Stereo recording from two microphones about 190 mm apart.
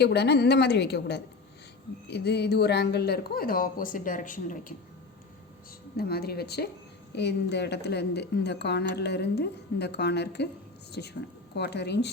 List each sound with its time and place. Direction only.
0.0 s speech: 60° left (ahead or behind); by 4.6 s 45° left (ahead or behind)
6.0 s speech: 55° left (ahead or behind)